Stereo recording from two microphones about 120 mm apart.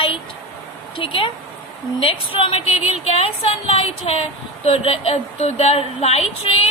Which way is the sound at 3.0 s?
60° left (ahead or behind).